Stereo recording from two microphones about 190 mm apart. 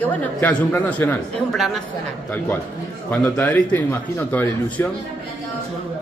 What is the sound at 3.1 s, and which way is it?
A man's voice, 10° left (ahead or behind).